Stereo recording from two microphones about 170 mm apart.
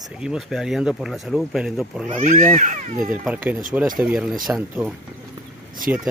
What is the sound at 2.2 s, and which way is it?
Speech, 50° right (ahead or behind).